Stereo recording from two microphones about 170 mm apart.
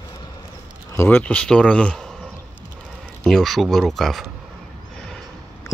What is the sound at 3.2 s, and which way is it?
Speech, centre (ahead or behind).